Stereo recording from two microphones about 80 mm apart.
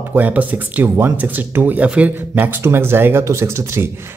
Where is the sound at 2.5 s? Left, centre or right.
Right.